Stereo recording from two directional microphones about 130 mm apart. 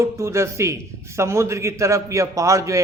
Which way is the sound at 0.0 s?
20° right (ahead or behind).